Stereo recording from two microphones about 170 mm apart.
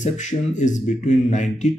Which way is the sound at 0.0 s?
45° left (ahead or behind).